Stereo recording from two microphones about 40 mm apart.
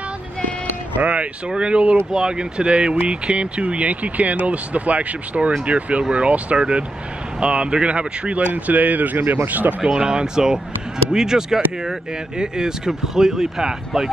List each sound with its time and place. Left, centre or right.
0.9 s a sound: right
1.6 s speech: right
9.8 s speech: centre